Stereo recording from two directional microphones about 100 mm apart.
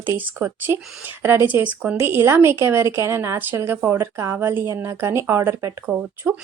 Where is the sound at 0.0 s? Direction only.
20° right (ahead or behind).